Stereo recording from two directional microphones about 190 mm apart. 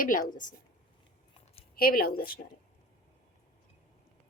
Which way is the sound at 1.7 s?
50° left (ahead or behind).